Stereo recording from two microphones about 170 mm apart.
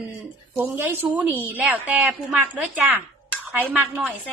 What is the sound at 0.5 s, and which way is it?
A woman's voice, 10° right (ahead or behind).